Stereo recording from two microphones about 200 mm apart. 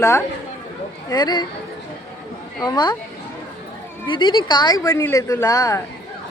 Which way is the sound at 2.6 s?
20° left (ahead or behind).